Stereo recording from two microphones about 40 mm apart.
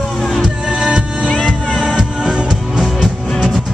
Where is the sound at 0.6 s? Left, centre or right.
Right.